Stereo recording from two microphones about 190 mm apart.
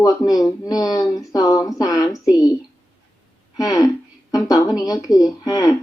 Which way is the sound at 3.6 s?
20° left (ahead or behind).